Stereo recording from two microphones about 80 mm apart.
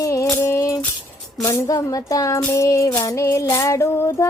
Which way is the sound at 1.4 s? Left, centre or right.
Left.